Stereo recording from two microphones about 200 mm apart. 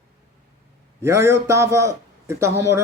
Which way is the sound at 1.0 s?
15° right (ahead or behind).